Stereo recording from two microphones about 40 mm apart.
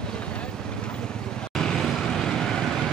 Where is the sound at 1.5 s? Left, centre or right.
Centre.